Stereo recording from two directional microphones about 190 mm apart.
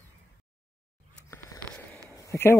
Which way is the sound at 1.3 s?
10° left (ahead or behind).